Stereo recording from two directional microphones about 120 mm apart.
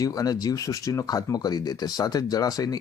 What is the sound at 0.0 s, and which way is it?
Speech, 30° left (ahead or behind).